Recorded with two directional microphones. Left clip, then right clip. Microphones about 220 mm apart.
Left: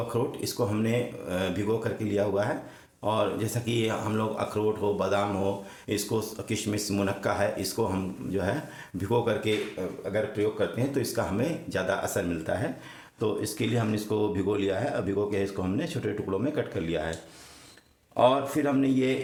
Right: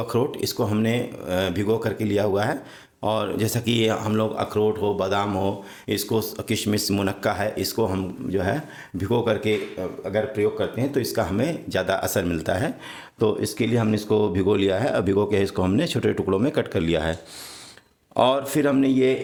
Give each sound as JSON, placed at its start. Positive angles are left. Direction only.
{"t": 0.1, "sound": "speech", "side_deg": -40}
{"t": 13.1, "sound": "speech", "side_deg": -35}
{"t": 18.2, "sound": "speech", "side_deg": -50}